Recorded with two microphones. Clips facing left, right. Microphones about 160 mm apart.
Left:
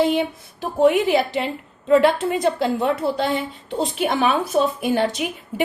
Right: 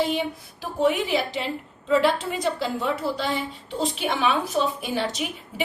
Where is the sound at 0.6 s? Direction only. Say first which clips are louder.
Left 6 dB; 60° left (ahead or behind).